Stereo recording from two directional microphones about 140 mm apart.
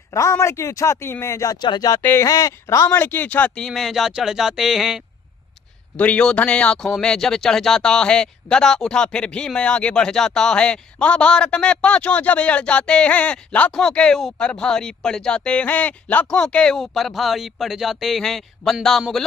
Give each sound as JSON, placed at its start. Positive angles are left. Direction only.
{"t": 0.1, "sound": "speech", "side_deg": 20}
{"t": 2.0, "sound": "speech", "side_deg": 15}
{"t": 2.2, "sound": "speech", "side_deg": 25}
{"t": 5.9, "sound": "speech", "side_deg": 10}